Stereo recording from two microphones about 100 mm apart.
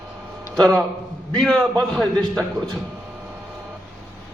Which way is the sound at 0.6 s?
5° left (ahead or behind).